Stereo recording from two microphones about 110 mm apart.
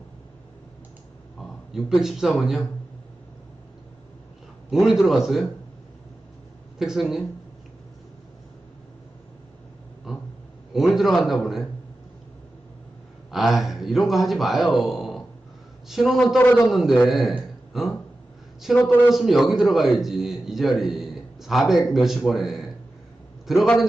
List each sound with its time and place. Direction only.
1.4 s a sound: 5° right (ahead or behind)
2.4 s a man's voice: centre (ahead or behind)
4.7 s a man's voice: centre (ahead or behind)
6.7 s speech: 5° right (ahead or behind)
10.1 s a sound: 5° right (ahead or behind)
10.7 s a man's voice: 5° right (ahead or behind)
13.3 s a man's voice: centre (ahead or behind)
14.8 s a sound: centre (ahead or behind)
15.9 s a man's voice: centre (ahead or behind)
18.8 s speech: 20° left (ahead or behind)
19.1 s a man's voice: centre (ahead or behind)